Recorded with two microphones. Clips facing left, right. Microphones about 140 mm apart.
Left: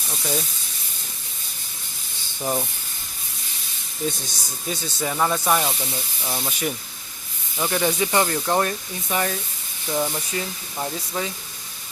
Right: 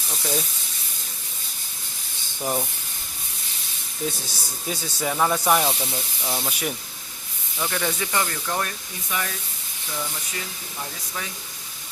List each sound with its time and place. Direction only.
0.1 s speech: centre (ahead or behind)
2.4 s speech: centre (ahead or behind)
4.7 s speech: 5° right (ahead or behind)
7.6 s speech: 20° left (ahead or behind)